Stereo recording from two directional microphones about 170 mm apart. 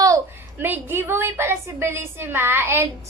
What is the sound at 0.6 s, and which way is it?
A woman's voice, 15° right (ahead or behind).